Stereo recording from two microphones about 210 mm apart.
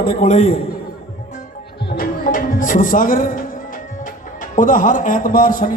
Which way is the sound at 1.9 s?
40° left (ahead or behind).